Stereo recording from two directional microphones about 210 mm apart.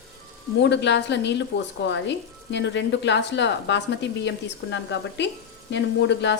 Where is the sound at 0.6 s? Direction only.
55° left (ahead or behind).